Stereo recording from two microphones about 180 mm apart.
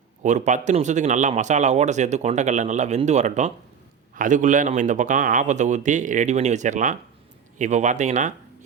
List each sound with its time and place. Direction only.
0.2 s a man's voice: 40° right (ahead or behind)